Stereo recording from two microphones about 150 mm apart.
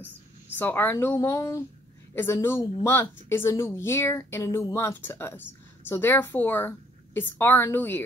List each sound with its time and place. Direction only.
0.6 s a woman's voice: 15° left (ahead or behind)